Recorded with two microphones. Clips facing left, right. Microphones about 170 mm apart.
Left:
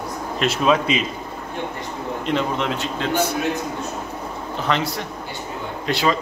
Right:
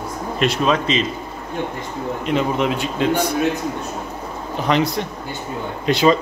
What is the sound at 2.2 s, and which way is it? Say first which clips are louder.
A man's voice: right 3 dB; 10° right (ahead or behind).